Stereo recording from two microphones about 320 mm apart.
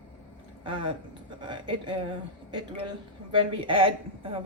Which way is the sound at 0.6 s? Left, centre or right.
Centre.